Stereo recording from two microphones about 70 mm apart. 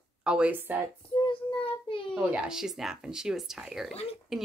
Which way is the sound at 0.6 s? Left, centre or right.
Right.